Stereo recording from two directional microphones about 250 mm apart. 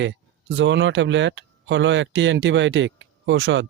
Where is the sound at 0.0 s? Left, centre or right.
Right.